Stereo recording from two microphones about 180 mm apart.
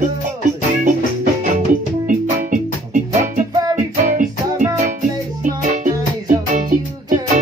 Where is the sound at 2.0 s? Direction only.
45° right (ahead or behind).